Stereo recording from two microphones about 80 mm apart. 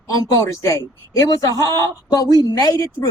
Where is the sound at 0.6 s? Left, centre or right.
Left.